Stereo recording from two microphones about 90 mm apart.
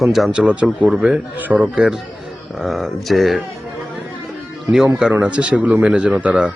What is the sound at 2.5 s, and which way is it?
Speech, centre (ahead or behind).